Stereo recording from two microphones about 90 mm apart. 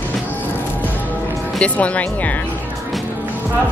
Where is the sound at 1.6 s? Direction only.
15° left (ahead or behind).